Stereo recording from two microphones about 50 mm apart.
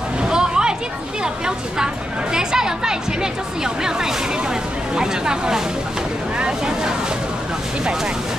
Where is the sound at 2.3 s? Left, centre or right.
Centre.